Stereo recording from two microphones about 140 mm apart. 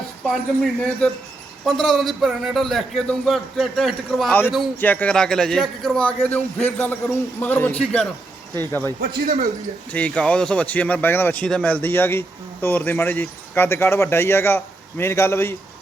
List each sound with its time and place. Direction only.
0.6 s a man's voice: 5° left (ahead or behind)
4.3 s speech: 15° left (ahead or behind)
9.0 s a man's voice: 70° right (ahead or behind)
9.9 s speech: 10° left (ahead or behind)